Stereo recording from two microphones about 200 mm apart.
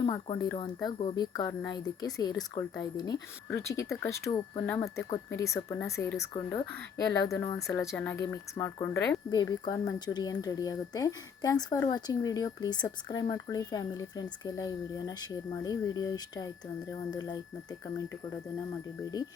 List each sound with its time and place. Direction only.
0.0 s speech: 20° left (ahead or behind)